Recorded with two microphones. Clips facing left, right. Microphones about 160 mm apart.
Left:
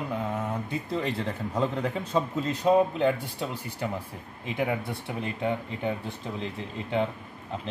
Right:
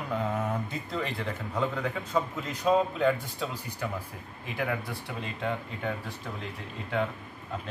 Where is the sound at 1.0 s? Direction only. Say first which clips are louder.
Left 2 dB; 25° left (ahead or behind).